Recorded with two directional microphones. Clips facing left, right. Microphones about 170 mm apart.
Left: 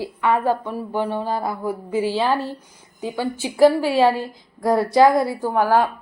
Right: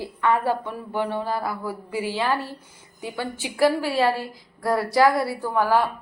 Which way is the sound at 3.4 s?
15° left (ahead or behind).